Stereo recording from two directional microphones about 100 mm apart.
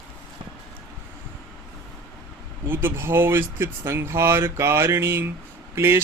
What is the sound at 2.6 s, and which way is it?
Speech, 20° right (ahead or behind).